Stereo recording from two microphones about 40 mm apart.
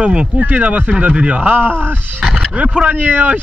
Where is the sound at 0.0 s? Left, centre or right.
Right.